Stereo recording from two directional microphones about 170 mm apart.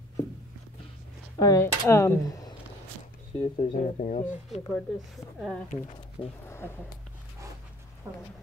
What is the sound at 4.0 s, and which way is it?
Speech, 45° left (ahead or behind).